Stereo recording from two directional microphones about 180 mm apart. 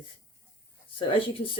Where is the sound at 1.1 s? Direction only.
30° left (ahead or behind).